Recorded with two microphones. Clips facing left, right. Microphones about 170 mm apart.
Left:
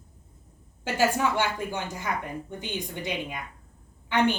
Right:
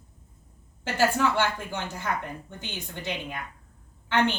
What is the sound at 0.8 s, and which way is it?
A woman's voice, 15° left (ahead or behind).